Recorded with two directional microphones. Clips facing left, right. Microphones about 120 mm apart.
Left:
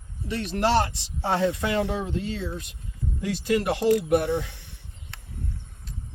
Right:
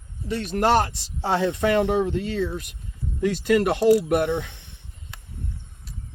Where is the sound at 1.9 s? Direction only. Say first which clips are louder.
Right 6 dB; 60° right (ahead or behind).